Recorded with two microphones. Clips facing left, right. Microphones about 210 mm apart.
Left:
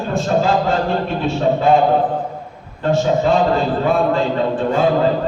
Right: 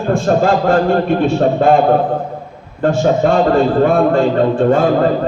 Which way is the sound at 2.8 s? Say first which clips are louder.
Right 3 dB; 50° right (ahead or behind).